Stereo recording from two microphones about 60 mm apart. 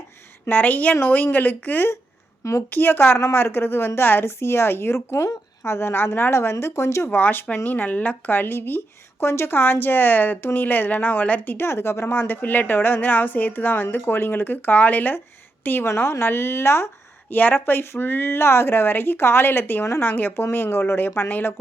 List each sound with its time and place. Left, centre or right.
0.4 s a woman's voice: left
2.4 s a woman's voice: left
2.6 s a woman's voice: left
7.1 s a woman's voice: left
15.9 s a woman's voice: left
17.3 s a woman's voice: left